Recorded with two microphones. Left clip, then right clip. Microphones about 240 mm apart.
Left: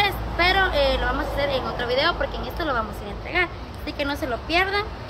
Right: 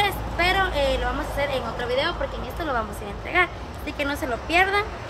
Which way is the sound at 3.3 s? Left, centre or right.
Centre.